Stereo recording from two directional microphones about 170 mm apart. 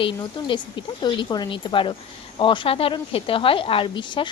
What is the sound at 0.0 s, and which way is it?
Speech, 30° left (ahead or behind).